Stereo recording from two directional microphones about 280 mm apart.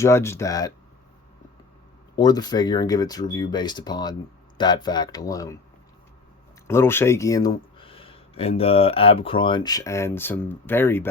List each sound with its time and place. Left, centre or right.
0.0 s speech: centre
2.1 s speech: centre
6.7 s speech: centre